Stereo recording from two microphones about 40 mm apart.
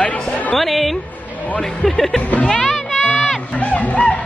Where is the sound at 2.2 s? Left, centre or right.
Left.